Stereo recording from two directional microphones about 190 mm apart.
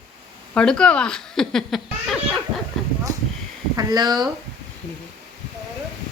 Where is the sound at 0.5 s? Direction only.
5° left (ahead or behind).